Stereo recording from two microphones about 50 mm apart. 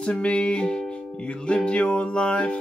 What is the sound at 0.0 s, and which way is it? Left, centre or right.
Music, left.